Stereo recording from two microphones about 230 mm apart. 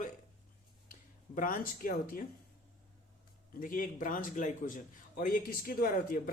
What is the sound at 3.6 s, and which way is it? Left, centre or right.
A man's voice, left.